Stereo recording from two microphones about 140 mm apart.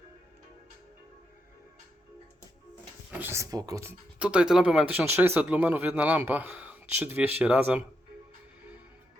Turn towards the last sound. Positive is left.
turn(degrees=-10)  # may be behind; listen again after turning